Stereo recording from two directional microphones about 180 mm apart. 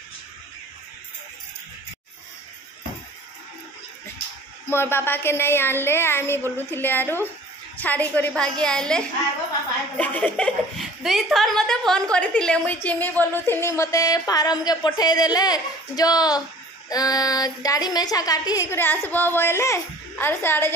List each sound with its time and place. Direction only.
4.6 s a woman's voice: 15° left (ahead or behind)